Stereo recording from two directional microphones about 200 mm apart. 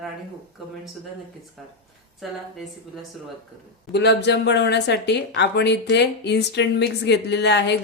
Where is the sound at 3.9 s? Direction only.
60° left (ahead or behind).